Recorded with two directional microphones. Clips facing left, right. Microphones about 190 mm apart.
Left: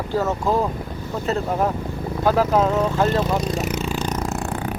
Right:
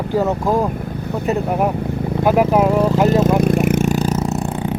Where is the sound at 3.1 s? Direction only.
45° right (ahead or behind).